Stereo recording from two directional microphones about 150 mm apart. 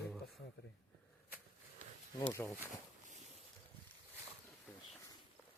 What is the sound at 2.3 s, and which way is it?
Speech, 15° left (ahead or behind).